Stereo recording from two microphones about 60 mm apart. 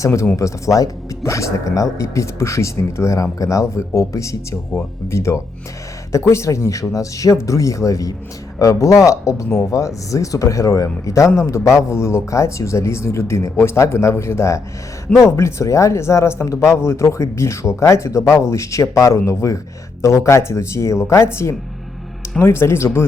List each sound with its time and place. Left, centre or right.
0.0 s speech: left